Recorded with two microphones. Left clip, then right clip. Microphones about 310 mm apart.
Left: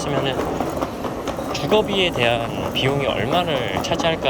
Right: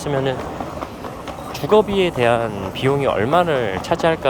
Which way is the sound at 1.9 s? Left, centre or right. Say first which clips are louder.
Right 2 dB; centre.